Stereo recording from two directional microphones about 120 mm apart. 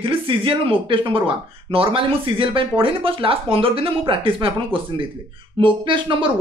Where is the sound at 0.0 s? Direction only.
50° right (ahead or behind).